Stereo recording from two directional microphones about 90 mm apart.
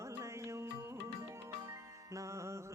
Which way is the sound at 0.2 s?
35° right (ahead or behind).